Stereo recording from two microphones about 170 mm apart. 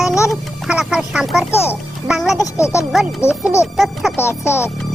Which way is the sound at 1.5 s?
15° left (ahead or behind).